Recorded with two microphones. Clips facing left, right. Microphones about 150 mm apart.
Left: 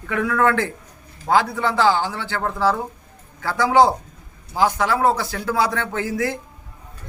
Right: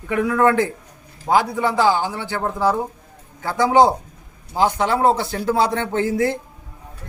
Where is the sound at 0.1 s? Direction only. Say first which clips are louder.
Right 2 dB; 15° right (ahead or behind).